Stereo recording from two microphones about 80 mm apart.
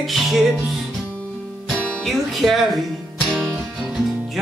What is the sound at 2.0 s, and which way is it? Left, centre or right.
Music, centre.